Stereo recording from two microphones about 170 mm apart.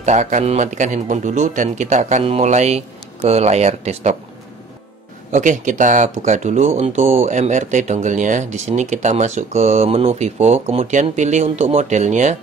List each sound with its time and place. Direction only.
0.0 s speech: 45° right (ahead or behind)
5.3 s speech: 45° right (ahead or behind)